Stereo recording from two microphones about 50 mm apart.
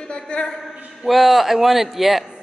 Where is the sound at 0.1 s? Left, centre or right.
Centre.